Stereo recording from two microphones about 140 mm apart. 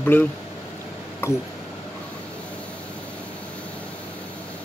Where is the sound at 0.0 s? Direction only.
15° left (ahead or behind).